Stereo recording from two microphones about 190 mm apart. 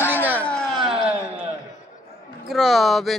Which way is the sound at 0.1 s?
10° right (ahead or behind).